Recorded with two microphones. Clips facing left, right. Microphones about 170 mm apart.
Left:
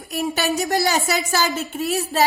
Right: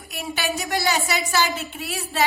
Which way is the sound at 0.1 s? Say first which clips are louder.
Left 5 dB; 40° left (ahead or behind).